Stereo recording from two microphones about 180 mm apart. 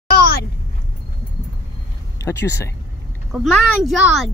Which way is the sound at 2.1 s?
15° left (ahead or behind).